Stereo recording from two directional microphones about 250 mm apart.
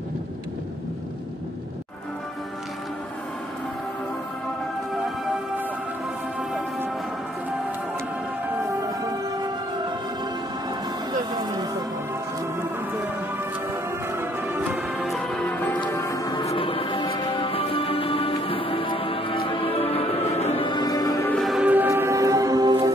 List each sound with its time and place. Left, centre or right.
11.3 s music: centre
14.1 s music: centre